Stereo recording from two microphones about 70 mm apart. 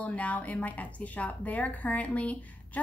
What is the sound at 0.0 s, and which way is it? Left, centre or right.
Speech, left.